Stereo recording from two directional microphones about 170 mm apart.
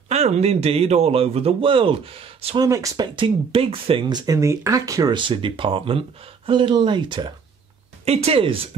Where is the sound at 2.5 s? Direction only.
20° right (ahead or behind).